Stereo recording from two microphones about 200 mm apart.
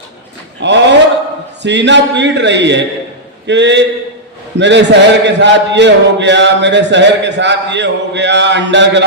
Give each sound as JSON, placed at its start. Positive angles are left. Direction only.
{"t": 0.6, "sound": "a man's voice", "side_deg": -60}